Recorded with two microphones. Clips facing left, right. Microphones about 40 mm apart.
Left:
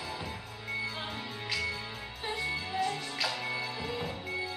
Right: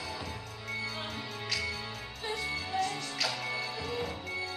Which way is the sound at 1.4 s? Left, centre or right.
Centre.